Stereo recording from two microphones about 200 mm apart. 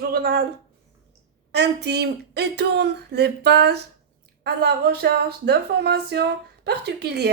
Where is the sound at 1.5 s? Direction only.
55° right (ahead or behind).